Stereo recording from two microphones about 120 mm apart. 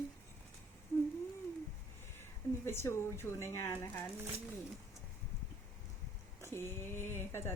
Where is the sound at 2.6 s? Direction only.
20° left (ahead or behind).